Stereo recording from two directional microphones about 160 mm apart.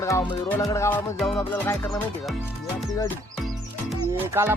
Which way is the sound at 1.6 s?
15° left (ahead or behind).